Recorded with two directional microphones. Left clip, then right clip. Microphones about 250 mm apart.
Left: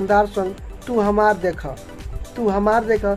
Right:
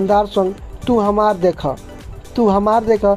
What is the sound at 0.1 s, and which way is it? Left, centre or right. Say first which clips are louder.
Speech: right 1 dB; right.